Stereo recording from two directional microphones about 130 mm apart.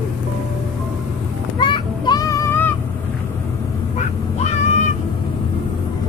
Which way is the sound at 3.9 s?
60° left (ahead or behind).